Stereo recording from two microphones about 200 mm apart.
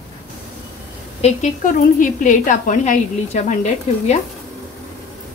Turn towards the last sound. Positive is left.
turn(degrees=35)  # may be behind; listen again after turning